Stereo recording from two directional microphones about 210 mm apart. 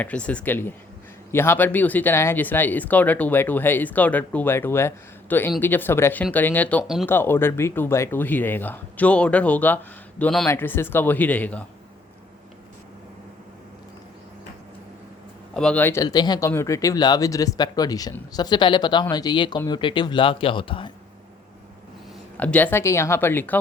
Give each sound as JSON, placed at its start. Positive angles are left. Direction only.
{"t": 0.0, "sound": "speech", "side_deg": 5}
{"t": 15.5, "sound": "speech", "side_deg": 5}
{"t": 22.4, "sound": "speech", "side_deg": 5}